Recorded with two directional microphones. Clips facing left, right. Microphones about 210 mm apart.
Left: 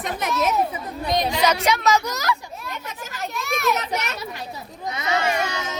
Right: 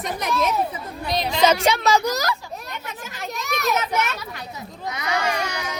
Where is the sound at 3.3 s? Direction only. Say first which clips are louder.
Left 1 dB; 40° right (ahead or behind).